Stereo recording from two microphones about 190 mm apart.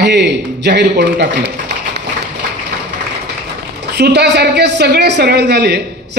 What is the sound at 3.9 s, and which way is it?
A woman's voice, 60° right (ahead or behind).